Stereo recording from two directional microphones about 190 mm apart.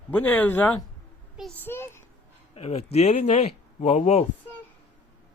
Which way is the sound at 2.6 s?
35° left (ahead or behind).